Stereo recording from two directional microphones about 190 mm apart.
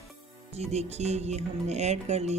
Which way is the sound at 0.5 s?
35° right (ahead or behind).